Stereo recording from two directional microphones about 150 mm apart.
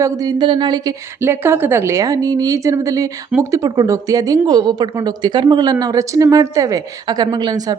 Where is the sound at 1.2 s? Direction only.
15° right (ahead or behind).